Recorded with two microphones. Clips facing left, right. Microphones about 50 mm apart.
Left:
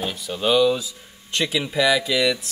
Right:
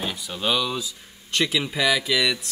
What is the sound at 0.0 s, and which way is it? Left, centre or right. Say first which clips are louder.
Speech: left 3 dB; centre.